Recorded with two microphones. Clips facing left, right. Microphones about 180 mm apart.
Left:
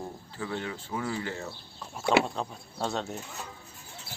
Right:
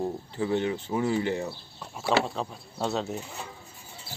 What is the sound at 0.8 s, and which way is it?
Speech, 20° right (ahead or behind).